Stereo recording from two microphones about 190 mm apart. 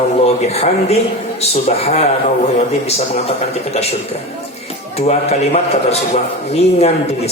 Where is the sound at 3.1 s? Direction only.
35° left (ahead or behind).